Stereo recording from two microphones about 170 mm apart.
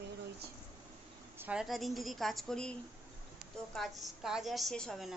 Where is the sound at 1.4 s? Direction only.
5° right (ahead or behind).